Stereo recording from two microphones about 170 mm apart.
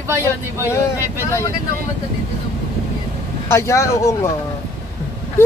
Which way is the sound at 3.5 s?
15° left (ahead or behind).